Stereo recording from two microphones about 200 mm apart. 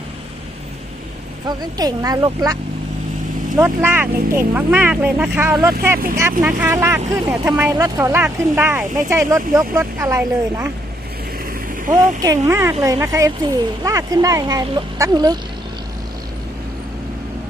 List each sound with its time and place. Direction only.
1.5 s speech: 20° right (ahead or behind)
11.9 s speech: 20° right (ahead or behind)